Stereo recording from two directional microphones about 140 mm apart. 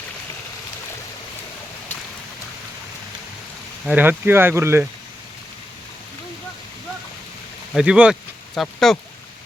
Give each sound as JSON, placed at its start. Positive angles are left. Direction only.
{"t": 3.8, "sound": "speech", "side_deg": -10}
{"t": 7.7, "sound": "speech", "side_deg": -5}